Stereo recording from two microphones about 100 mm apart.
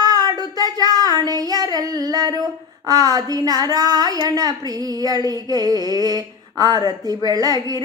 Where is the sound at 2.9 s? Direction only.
40° right (ahead or behind).